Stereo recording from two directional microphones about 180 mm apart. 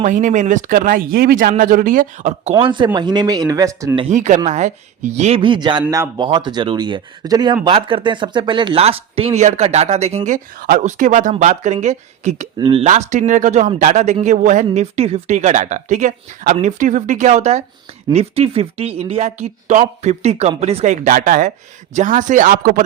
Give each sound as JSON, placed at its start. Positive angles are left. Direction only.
{"t": 0.0, "sound": "speech", "side_deg": -45}
{"t": 2.6, "sound": "speech", "side_deg": -25}
{"t": 3.9, "sound": "a man's voice", "side_deg": -40}